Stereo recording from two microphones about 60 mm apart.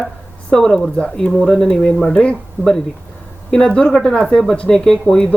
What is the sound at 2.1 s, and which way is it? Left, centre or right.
Speech, centre.